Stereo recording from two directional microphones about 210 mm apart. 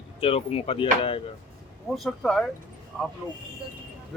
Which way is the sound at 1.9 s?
Centre (ahead or behind).